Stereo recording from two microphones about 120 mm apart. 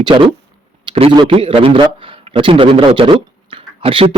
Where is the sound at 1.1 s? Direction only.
45° right (ahead or behind).